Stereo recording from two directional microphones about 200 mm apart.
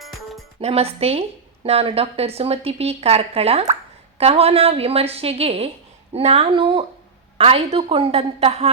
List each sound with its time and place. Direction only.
0.0 s music: centre (ahead or behind)
0.6 s speech: 30° right (ahead or behind)